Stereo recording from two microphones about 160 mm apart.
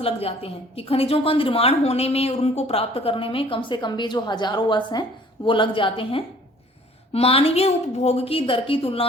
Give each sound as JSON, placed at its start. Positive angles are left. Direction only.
{"t": 0.0, "sound": "a woman's voice", "side_deg": 35}